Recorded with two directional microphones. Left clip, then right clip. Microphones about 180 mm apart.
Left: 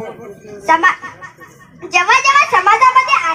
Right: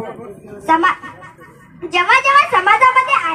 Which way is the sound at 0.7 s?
15° left (ahead or behind).